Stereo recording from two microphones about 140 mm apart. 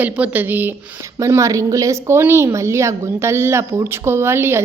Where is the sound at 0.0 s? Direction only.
10° right (ahead or behind).